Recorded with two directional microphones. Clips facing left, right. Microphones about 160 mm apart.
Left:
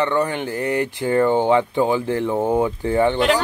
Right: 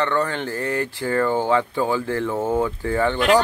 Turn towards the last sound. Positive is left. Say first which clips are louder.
# left 3 dB
turn(degrees=20)  # may be behind; listen again after turning